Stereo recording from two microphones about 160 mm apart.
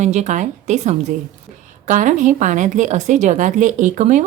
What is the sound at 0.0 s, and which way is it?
A woman's voice, 45° right (ahead or behind).